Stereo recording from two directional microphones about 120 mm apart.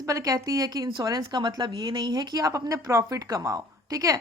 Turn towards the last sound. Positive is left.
turn(degrees=-30)  # may be behind; listen again after turning